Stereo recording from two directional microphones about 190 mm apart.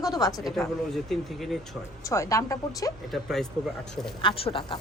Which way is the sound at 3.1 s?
Centre (ahead or behind).